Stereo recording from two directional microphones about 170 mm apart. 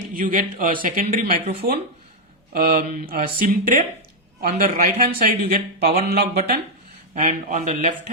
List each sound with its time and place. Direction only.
0.1 s speech: 55° right (ahead or behind)
2.5 s speech: 65° right (ahead or behind)
7.2 s speech: 45° right (ahead or behind)